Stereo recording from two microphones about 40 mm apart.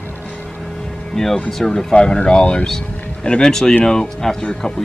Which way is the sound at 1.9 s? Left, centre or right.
Left.